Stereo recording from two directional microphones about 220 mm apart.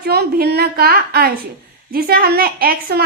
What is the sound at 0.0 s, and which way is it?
A child's voice, 45° right (ahead or behind).